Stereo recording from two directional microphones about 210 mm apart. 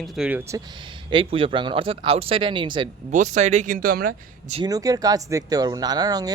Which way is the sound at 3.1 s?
35° right (ahead or behind).